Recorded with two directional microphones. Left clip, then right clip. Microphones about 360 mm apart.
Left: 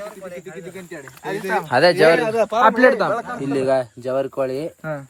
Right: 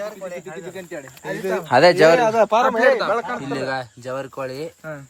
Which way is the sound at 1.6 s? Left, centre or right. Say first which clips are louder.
Right 2 dB; centre.